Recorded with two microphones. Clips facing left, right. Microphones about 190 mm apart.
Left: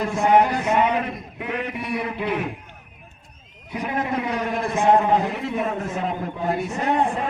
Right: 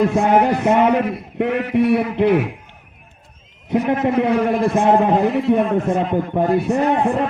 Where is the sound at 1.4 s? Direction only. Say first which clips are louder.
Right 12 dB; 70° right (ahead or behind).